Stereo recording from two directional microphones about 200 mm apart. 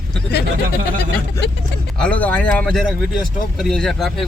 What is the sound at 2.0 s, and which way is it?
Speech, 5° left (ahead or behind).